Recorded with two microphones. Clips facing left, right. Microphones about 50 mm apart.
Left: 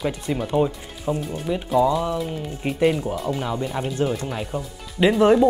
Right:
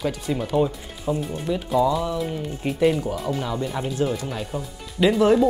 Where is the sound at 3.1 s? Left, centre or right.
Centre.